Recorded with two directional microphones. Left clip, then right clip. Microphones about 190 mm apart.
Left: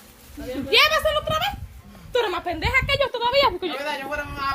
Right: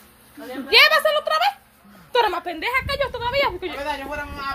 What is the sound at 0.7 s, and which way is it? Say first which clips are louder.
Speech: right 3 dB; 20° left (ahead or behind).